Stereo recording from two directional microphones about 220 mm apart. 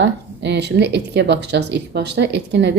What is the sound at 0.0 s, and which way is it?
Speech, 50° right (ahead or behind).